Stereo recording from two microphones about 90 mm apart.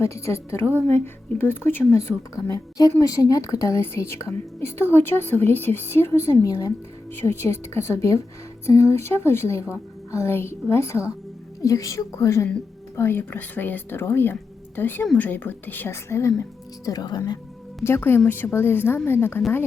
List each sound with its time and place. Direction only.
0.0 s a woman's voice: 30° left (ahead or behind)
2.7 s speech: 40° left (ahead or behind)
4.9 s a woman's voice: 25° left (ahead or behind); by 17.4 s 50° left (ahead or behind)
17.8 s a woman's voice: 25° left (ahead or behind)